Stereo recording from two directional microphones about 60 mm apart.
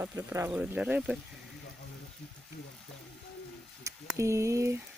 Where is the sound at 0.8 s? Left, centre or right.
Right.